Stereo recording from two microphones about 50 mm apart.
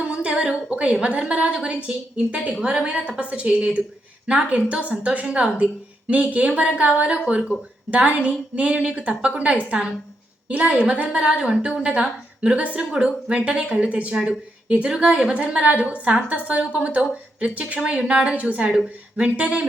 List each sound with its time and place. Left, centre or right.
0.1 s a woman's voice: right